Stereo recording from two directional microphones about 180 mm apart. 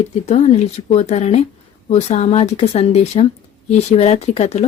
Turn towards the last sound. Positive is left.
turn(degrees=35)  # may be behind; listen again after turning